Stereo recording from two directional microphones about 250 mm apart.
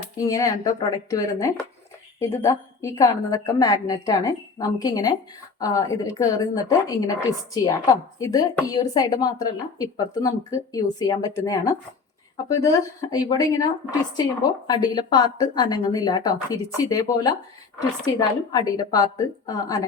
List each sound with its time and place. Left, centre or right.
0.3 s a woman's voice: centre
14.7 s a woman's voice: centre